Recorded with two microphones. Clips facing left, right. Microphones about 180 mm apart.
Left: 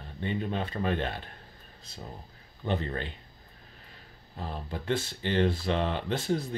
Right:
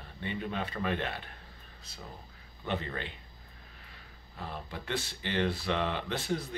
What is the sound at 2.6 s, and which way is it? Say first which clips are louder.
Speech: left 4 dB; 35° left (ahead or behind).